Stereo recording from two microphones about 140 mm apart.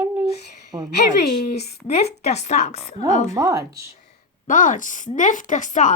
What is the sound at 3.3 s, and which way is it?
Speech, 25° right (ahead or behind).